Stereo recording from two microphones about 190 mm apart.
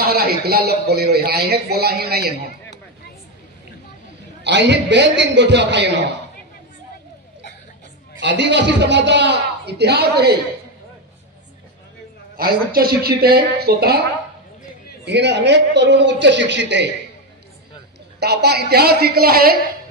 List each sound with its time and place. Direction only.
0.0 s a man's voice: 55° right (ahead or behind)
4.4 s a man's voice: 65° right (ahead or behind)
8.2 s a man's voice: 65° right (ahead or behind)
12.4 s a man's voice: 50° right (ahead or behind)
15.0 s a man's voice: 65° right (ahead or behind)
18.2 s a man's voice: 60° right (ahead or behind)